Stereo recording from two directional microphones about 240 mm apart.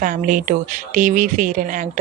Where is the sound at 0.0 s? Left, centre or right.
Right.